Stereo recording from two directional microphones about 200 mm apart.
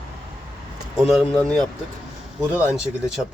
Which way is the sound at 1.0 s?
Centre (ahead or behind).